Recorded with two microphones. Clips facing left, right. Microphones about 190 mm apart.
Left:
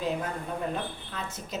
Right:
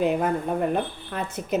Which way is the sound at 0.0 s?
60° right (ahead or behind).